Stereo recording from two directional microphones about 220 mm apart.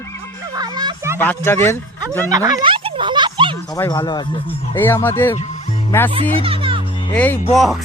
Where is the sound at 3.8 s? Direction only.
15° left (ahead or behind).